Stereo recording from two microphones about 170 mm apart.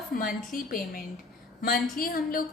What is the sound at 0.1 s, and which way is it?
A woman's voice, 55° left (ahead or behind).